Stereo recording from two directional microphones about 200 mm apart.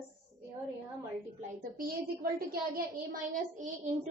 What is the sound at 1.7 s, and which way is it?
A woman's voice, 50° right (ahead or behind).